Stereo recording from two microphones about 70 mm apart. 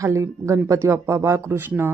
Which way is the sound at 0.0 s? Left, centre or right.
Right.